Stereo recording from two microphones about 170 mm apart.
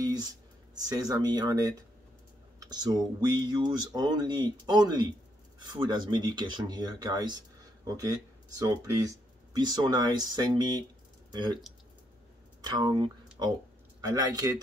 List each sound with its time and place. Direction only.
0.0 s speech: 25° right (ahead or behind)
12.6 s speech: 25° right (ahead or behind)